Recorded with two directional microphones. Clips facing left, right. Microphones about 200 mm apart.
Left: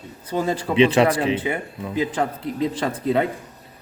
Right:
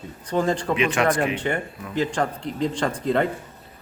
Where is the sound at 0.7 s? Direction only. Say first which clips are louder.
Left 8 dB; 30° left (ahead or behind).